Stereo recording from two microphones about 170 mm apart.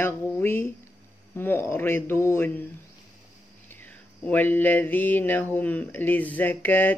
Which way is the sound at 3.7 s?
10° left (ahead or behind).